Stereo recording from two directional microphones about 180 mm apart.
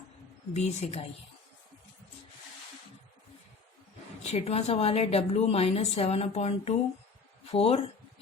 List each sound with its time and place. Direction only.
0.5 s a woman's voice: 35° left (ahead or behind)
4.2 s a woman's voice: 35° left (ahead or behind)